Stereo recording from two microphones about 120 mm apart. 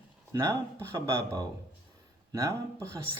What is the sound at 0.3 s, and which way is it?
A man's voice, 30° right (ahead or behind).